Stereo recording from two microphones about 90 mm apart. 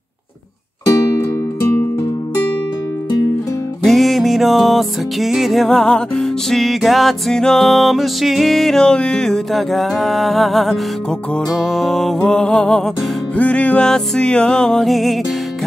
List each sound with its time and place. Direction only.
0.8 s music: 30° left (ahead or behind)
3.8 s music: centre (ahead or behind)